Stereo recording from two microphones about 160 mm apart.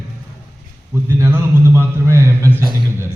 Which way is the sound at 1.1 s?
15° right (ahead or behind).